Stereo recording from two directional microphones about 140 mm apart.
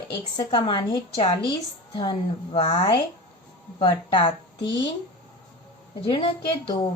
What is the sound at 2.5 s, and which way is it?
Speech, 50° left (ahead or behind).